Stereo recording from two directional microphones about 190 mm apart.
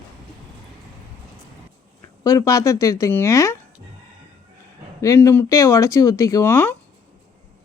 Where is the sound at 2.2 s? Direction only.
15° left (ahead or behind).